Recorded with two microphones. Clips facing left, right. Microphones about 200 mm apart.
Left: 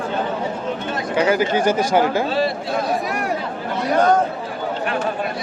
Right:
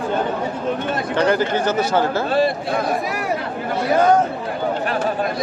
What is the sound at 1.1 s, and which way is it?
Speech, 10° left (ahead or behind).